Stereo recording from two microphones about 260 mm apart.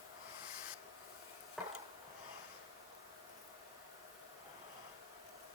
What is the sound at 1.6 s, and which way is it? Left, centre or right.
Chopping, centre.